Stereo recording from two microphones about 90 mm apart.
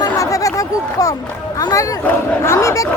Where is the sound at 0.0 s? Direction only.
40° left (ahead or behind).